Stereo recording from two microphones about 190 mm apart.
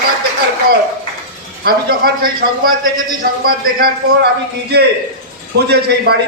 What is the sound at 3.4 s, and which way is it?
Speech, 55° right (ahead or behind).